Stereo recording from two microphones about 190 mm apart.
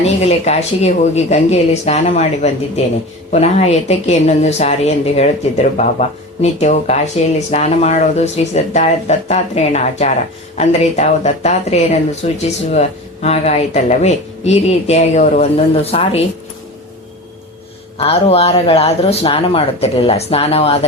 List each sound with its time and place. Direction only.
0.0 s speech: 35° left (ahead or behind)
17.9 s speech: 30° left (ahead or behind)